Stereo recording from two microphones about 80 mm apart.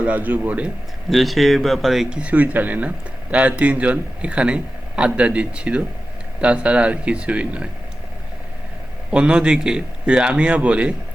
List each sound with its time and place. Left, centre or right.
0.0 s speech: centre
1.1 s a man's voice: centre
9.0 s a man's voice: centre